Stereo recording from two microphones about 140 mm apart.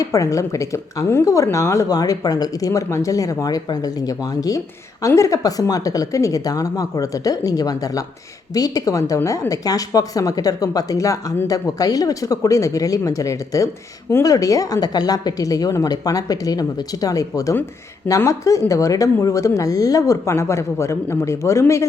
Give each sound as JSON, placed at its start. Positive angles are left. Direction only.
{"t": 0.0, "sound": "speech", "side_deg": 25}